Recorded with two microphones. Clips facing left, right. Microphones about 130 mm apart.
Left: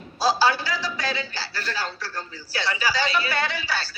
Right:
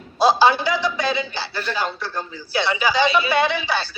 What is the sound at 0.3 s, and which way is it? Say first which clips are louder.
A man's voice: right 5 dB; 20° right (ahead or behind).